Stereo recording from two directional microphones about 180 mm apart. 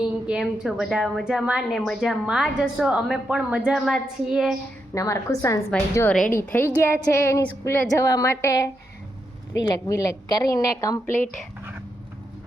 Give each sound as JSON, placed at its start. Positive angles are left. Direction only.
{"t": 0.3, "sound": "a woman's voice", "side_deg": -5}
{"t": 4.9, "sound": "a woman's voice", "side_deg": 15}